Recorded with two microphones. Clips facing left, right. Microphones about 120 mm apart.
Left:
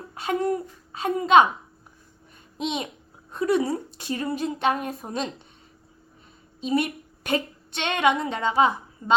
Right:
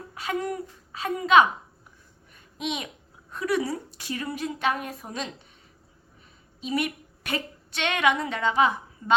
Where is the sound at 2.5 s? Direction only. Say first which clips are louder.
Left 3 dB; 30° left (ahead or behind).